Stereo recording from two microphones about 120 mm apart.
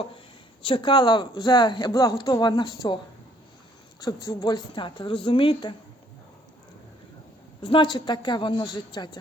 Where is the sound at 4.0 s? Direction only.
35° left (ahead or behind).